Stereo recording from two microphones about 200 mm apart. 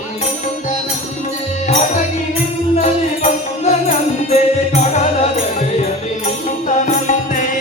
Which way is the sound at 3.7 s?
35° left (ahead or behind).